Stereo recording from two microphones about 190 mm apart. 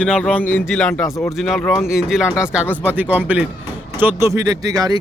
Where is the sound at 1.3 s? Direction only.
Centre (ahead or behind); by 5.0 s 20° right (ahead or behind).